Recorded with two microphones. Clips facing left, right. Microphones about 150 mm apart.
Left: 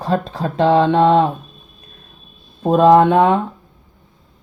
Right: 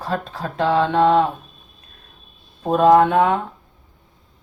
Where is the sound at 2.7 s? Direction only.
30° left (ahead or behind).